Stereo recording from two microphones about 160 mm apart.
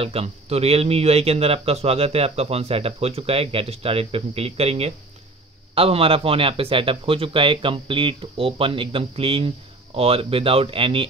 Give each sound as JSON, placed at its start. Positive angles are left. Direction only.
{"t": 0.0, "sound": "a man's voice", "side_deg": -40}